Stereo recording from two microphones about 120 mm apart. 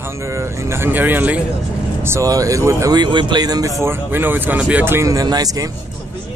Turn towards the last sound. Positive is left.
turn(degrees=-30)  # may be behind; listen again after turning